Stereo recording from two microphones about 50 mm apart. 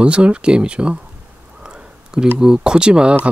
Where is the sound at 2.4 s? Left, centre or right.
Centre.